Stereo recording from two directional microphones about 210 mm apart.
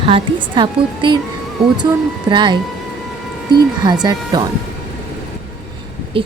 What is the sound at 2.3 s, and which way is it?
Speech, 20° right (ahead or behind).